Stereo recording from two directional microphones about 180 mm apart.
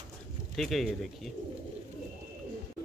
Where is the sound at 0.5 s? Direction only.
Centre (ahead or behind).